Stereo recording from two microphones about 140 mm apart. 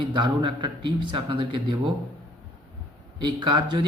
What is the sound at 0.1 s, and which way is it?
Speech, 35° right (ahead or behind).